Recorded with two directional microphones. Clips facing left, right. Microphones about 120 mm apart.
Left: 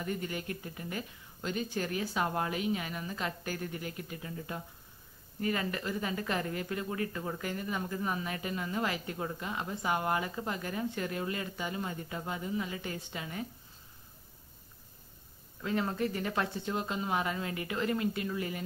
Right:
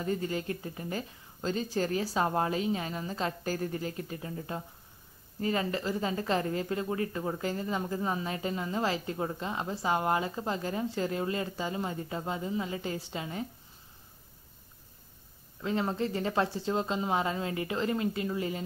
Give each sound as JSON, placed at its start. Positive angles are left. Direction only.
{"t": 0.0, "sound": "speech", "side_deg": -30}
{"t": 15.6, "sound": "speech", "side_deg": -25}